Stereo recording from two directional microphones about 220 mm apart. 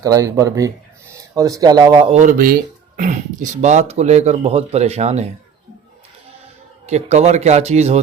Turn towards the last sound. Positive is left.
turn(degrees=-30)  # may be behind; listen again after turning